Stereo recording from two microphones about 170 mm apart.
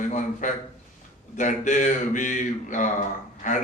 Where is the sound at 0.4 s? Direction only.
50° left (ahead or behind).